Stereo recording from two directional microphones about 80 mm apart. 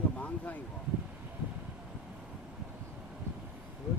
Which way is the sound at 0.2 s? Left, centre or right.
Centre.